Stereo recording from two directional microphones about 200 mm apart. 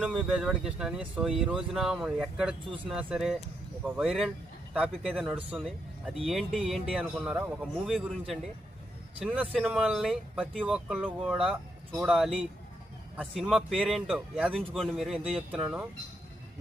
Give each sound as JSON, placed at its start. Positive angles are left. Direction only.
{"t": 0.0, "sound": "speech", "side_deg": -5}
{"t": 9.2, "sound": "speech", "side_deg": -5}